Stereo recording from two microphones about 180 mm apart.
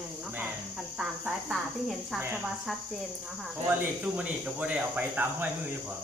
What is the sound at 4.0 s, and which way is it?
Speech, 5° right (ahead or behind).